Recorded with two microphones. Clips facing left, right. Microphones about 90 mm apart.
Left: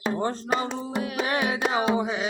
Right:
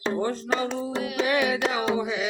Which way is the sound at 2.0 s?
35° left (ahead or behind).